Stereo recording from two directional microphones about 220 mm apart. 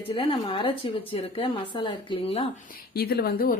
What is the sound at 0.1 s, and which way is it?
A woman's voice, 25° left (ahead or behind).